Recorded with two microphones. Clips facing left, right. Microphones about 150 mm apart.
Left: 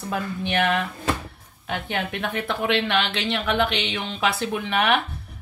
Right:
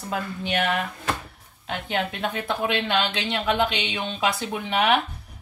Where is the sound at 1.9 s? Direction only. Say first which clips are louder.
Right 2 dB; 20° right (ahead or behind).